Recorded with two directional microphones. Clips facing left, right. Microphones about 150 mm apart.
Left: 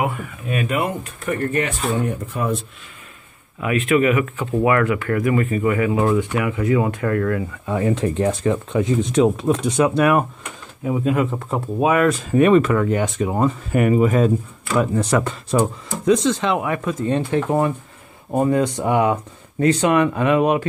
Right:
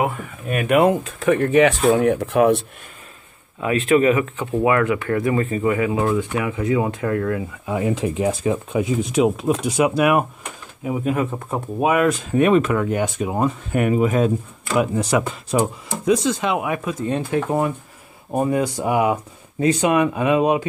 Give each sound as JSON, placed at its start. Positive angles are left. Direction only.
{"t": 0.5, "sound": "speech", "side_deg": -55}
{"t": 0.7, "sound": "speech", "side_deg": -90}
{"t": 3.6, "sound": "speech", "side_deg": -35}
{"t": 4.6, "sound": "speech", "side_deg": -20}
{"t": 7.6, "sound": "speech", "side_deg": -5}
{"t": 12.1, "sound": "speech", "side_deg": 0}
{"t": 18.3, "sound": "speech", "side_deg": -15}